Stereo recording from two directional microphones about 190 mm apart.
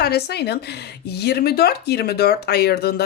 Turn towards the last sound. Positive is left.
turn(degrees=55)  # may be behind; listen again after turning